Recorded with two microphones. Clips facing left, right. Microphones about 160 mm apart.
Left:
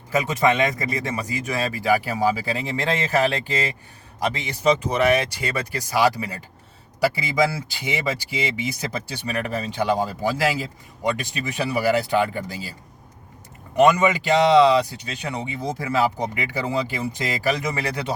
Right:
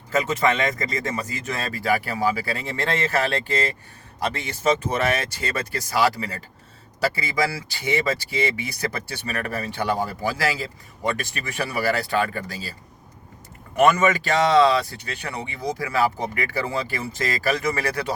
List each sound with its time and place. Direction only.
0.1 s speech: 15° left (ahead or behind)
13.7 s speech: 15° left (ahead or behind)